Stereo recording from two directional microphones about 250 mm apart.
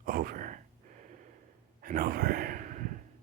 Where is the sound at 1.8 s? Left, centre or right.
Right.